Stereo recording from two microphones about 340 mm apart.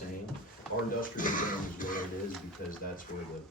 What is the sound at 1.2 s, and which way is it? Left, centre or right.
Speech, left.